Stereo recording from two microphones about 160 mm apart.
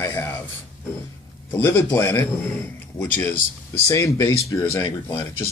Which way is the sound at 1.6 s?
15° left (ahead or behind).